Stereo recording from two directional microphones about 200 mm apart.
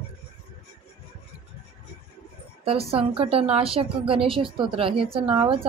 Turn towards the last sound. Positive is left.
turn(degrees=-25)  # may be behind; listen again after turning